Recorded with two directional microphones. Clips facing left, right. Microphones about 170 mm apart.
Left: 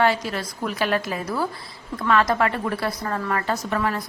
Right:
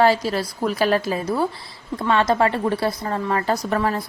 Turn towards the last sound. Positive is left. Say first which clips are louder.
# right 3 dB
turn(degrees=-30)  # may be behind; listen again after turning